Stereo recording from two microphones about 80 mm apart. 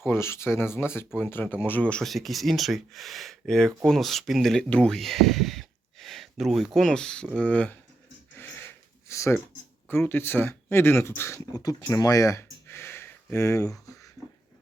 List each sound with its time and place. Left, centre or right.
0.1 s speech: left; by 2.0 s centre
2.0 s speech: centre
4.7 s speech: centre
4.9 s a sound: centre
6.7 s speech: centre
8.4 s a sound: left
9.9 s speech: left
11.5 s speech: left